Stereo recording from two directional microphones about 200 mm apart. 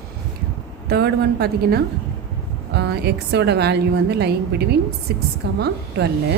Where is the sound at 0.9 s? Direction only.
55° right (ahead or behind).